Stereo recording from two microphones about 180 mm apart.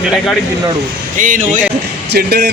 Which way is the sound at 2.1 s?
65° right (ahead or behind).